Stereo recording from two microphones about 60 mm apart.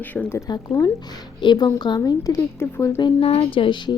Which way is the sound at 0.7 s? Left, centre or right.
Left.